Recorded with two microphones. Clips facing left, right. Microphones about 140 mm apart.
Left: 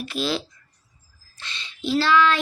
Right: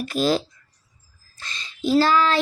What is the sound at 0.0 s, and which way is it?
Speech, 45° right (ahead or behind).